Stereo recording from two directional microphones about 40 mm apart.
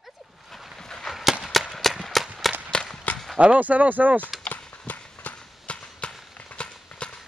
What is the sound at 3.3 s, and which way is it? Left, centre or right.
Speech, right.